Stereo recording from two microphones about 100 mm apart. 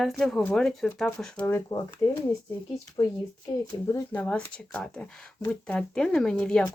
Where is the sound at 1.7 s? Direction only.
65° left (ahead or behind).